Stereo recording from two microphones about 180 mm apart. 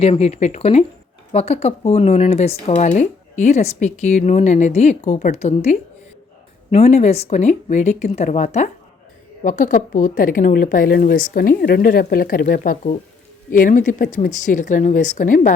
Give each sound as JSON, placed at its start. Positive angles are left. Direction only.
{"t": 0.0, "sound": "a woman's voice", "side_deg": 35}